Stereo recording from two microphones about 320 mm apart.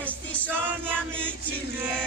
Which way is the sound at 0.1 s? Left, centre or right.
Centre.